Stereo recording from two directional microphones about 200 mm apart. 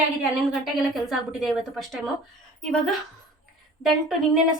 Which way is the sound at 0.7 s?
Centre (ahead or behind).